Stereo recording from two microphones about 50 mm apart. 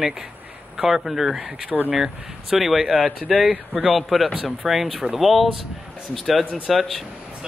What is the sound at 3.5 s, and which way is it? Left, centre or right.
Speech, right.